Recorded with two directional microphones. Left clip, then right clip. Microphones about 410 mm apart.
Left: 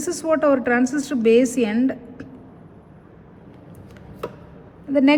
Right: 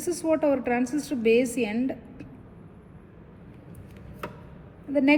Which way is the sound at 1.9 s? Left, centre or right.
Left.